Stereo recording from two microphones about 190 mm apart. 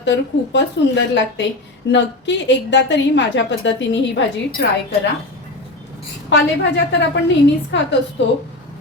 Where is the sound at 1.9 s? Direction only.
70° left (ahead or behind).